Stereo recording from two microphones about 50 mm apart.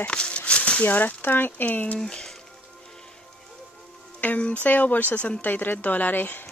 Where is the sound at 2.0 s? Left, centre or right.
Centre.